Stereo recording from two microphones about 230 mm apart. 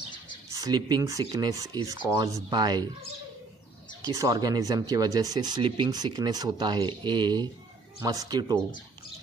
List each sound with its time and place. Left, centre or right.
0.5 s speech: centre
4.0 s speech: centre